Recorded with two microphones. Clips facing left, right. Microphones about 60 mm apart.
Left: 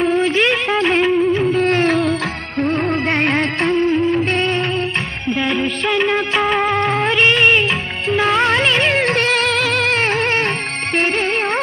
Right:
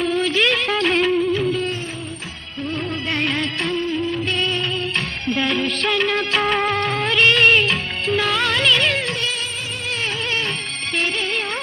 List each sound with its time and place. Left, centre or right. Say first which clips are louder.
0.3 s music: left 3 dB; centre
1.4 s music: left 7 dB; left
2.6 s music: left 8 dB; left
5.2 s music of bollywood: left 3 dB; centre
8.3 s music: left 5 dB; left